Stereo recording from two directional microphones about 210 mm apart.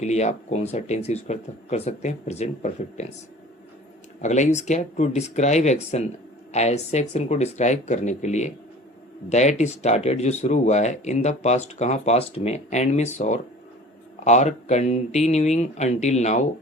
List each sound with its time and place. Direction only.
0.0 s speech: 30° left (ahead or behind)
4.2 s speech: 35° left (ahead or behind)